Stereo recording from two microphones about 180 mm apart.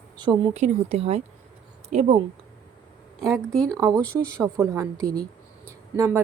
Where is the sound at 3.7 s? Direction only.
20° right (ahead or behind).